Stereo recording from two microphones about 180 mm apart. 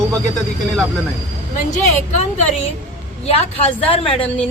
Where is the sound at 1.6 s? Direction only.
40° left (ahead or behind).